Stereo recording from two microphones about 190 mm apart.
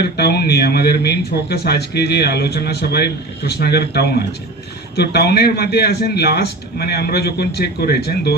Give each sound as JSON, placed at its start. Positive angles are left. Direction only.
{"t": 0.0, "sound": "speech", "side_deg": 55}